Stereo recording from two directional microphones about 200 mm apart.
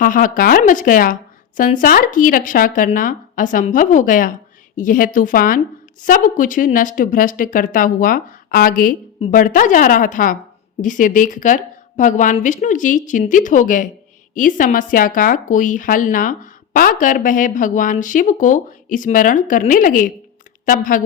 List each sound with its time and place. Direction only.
0.0 s speech: 45° left (ahead or behind)